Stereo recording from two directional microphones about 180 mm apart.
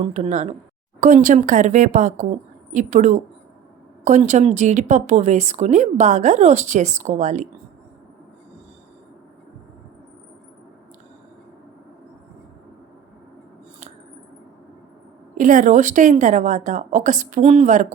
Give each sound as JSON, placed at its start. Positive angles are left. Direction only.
{"t": 0.0, "sound": "a woman's voice", "side_deg": -40}
{"t": 15.4, "sound": "a woman's voice", "side_deg": -45}